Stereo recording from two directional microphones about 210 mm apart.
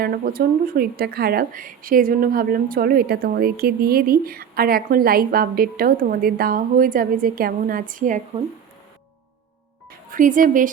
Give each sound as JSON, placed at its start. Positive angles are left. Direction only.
{"t": 0.0, "sound": "speech", "side_deg": -45}
{"t": 10.1, "sound": "speech", "side_deg": -40}